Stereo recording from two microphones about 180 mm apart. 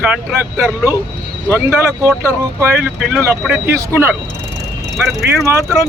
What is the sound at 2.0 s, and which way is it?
Speech, 10° right (ahead or behind).